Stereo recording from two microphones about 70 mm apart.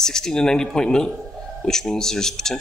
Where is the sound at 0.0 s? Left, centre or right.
Centre.